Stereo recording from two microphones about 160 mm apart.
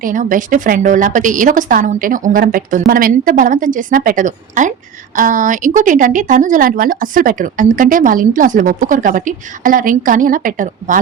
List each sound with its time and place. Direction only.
0.0 s a woman's voice: 55° right (ahead or behind)